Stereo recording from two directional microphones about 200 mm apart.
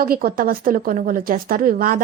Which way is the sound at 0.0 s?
45° right (ahead or behind).